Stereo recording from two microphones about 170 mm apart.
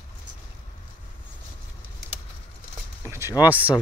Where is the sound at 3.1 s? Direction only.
15° right (ahead or behind).